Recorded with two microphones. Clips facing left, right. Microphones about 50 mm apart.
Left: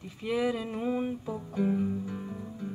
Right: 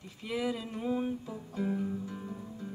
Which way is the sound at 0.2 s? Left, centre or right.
Centre.